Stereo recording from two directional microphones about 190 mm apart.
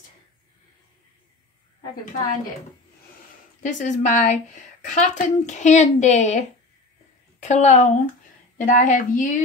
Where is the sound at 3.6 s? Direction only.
40° left (ahead or behind).